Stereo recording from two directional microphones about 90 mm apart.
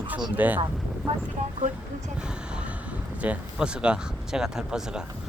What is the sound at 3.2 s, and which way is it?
Speech, 10° right (ahead or behind).